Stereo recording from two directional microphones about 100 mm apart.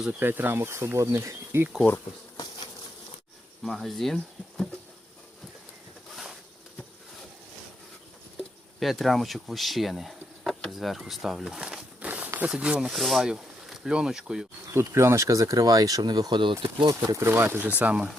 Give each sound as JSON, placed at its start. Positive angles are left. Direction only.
{"t": 0.2, "sound": "speech", "side_deg": -20}
{"t": 3.6, "sound": "speech", "side_deg": 0}
{"t": 6.1, "sound": "a sound", "side_deg": 0}
{"t": 8.8, "sound": "speech", "side_deg": 0}
{"t": 14.7, "sound": "speech", "side_deg": -25}
{"t": 16.9, "sound": "speech", "side_deg": -30}